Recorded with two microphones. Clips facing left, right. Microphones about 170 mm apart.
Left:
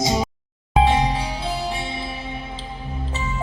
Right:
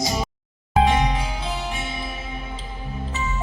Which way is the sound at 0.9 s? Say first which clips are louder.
Left 1 dB; 30° left (ahead or behind).